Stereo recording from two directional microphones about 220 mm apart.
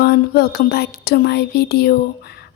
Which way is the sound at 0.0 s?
45° left (ahead or behind).